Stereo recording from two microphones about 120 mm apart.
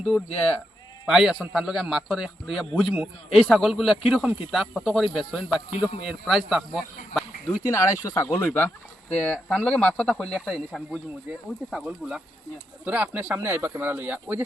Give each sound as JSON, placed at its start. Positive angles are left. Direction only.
{"t": 0.0, "sound": "speech", "side_deg": 0}
{"t": 7.4, "sound": "speech", "side_deg": 25}